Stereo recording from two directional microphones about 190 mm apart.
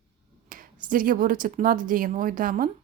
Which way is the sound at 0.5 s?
45° right (ahead or behind).